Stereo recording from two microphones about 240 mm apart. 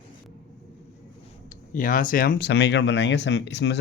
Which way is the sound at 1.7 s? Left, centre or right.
Left.